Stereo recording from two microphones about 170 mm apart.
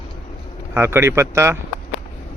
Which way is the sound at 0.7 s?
15° right (ahead or behind).